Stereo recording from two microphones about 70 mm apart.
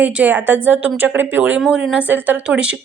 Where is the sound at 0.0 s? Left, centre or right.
Right.